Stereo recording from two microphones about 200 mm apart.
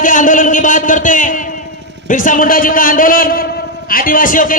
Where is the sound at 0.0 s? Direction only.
40° left (ahead or behind).